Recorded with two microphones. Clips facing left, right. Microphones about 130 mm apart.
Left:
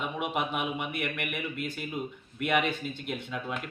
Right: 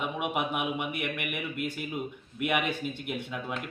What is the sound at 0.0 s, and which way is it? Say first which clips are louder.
A man's voice: right 1 dB; 5° right (ahead or behind).